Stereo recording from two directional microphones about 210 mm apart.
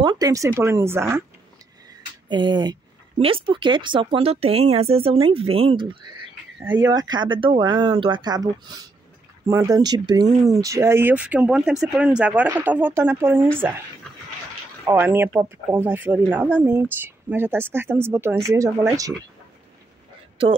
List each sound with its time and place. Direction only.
0.0 s speech: 20° right (ahead or behind)
2.2 s speech: 20° right (ahead or behind)
14.9 s speech: 10° right (ahead or behind)